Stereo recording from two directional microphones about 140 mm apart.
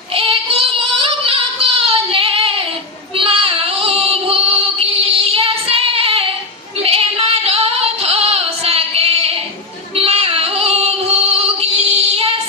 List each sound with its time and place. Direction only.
0.1 s child singing: 40° right (ahead or behind)
6.8 s female singing: 45° right (ahead or behind)